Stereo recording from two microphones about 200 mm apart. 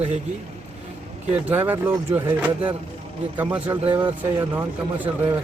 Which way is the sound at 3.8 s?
25° right (ahead or behind).